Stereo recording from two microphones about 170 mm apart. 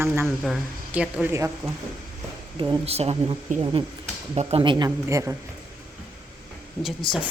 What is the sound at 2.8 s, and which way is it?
Speech, 35° right (ahead or behind).